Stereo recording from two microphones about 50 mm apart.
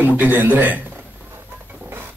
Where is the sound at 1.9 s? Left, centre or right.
Right.